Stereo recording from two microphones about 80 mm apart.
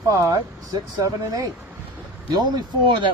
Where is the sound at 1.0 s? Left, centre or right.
Right.